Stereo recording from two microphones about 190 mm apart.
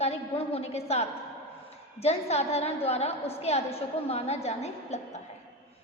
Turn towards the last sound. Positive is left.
turn(degrees=35)  # may be behind; listen again after turning